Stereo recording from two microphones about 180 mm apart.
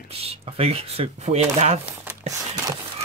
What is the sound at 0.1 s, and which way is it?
Speech, 35° right (ahead or behind).